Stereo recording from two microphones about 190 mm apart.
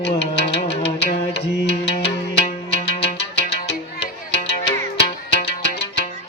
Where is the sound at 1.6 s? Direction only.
30° left (ahead or behind).